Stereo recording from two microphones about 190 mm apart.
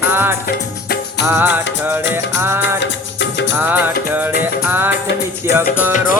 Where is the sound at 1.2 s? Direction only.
10° right (ahead or behind).